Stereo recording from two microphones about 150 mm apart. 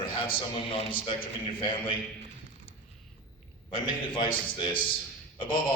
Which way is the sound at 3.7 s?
35° left (ahead or behind).